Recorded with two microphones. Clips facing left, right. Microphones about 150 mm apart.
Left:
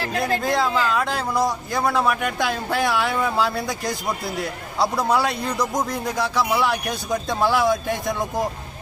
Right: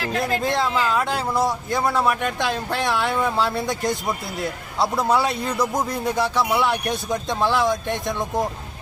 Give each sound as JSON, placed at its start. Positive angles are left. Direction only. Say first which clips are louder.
{"t": 0.5, "sound": "speech", "louder": "left 1 dB", "side_deg": 0}